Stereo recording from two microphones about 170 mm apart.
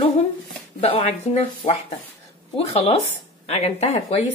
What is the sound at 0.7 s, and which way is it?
Speech, 35° left (ahead or behind).